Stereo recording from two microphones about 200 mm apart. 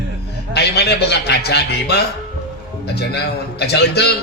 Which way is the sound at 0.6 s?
55° left (ahead or behind).